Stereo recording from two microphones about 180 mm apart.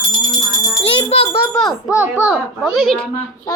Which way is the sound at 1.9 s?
10° right (ahead or behind).